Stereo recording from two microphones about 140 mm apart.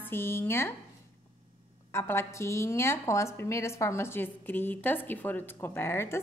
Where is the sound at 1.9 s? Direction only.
20° left (ahead or behind).